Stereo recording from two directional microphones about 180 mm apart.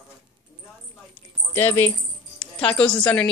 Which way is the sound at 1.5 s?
15° left (ahead or behind).